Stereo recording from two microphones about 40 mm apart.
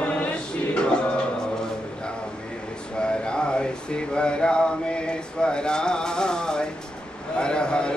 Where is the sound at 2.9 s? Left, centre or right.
Left.